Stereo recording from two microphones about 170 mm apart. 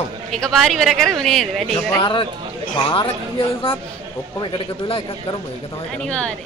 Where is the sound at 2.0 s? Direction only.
30° left (ahead or behind).